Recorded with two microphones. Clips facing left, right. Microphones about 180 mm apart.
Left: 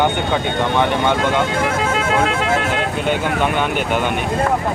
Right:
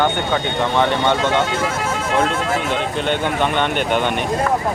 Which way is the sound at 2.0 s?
65° left (ahead or behind).